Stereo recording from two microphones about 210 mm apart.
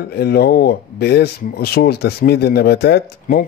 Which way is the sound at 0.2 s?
45° left (ahead or behind).